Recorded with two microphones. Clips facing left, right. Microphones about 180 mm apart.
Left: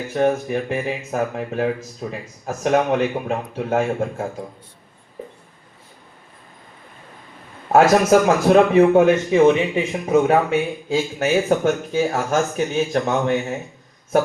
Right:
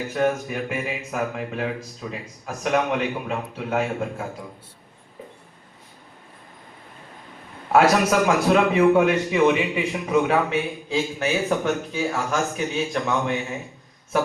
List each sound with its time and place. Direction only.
0.2 s a man's voice: 35° left (ahead or behind)
7.7 s a man's voice: 40° left (ahead or behind)